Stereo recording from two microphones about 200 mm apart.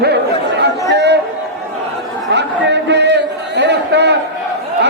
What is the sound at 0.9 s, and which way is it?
Music, 60° right (ahead or behind).